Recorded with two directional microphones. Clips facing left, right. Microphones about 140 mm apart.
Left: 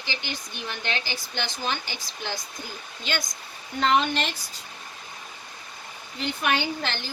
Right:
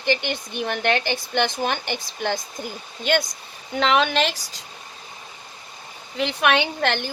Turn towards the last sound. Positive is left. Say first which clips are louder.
# right 6 dB
turn(degrees=-60)  # may be behind; listen again after turning